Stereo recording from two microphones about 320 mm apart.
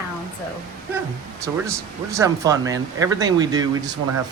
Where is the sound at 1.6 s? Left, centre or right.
Centre.